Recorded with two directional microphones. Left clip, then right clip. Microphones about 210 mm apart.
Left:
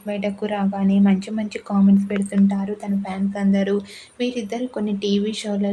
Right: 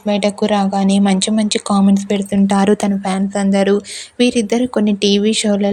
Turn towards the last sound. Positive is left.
turn(degrees=-30)  # may be behind; listen again after turning